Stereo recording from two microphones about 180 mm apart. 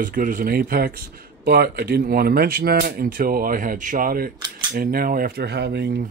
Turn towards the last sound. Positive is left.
turn(degrees=-65)  # may be behind; listen again after turning